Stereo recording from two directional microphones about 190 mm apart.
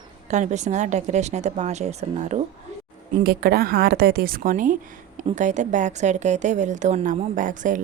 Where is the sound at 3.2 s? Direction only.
55° right (ahead or behind).